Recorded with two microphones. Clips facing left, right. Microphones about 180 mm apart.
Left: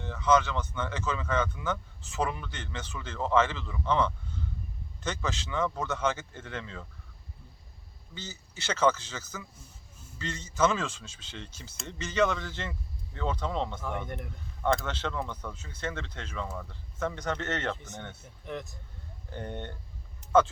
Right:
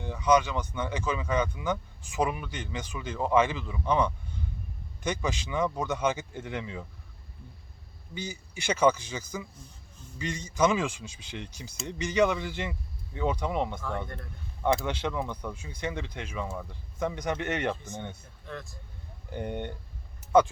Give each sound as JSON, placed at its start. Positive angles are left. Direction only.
{"t": 0.0, "sound": "speech", "side_deg": -15}
{"t": 8.1, "sound": "speech", "side_deg": -15}
{"t": 14.8, "sound": "speech", "side_deg": -15}
{"t": 18.4, "sound": "speech", "side_deg": 20}
{"t": 19.3, "sound": "speech", "side_deg": -10}
{"t": 20.2, "sound": "a sound", "side_deg": -15}